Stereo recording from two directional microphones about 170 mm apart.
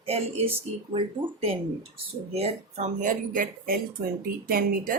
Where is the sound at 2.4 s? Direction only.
40° right (ahead or behind); by 4.9 s 60° right (ahead or behind).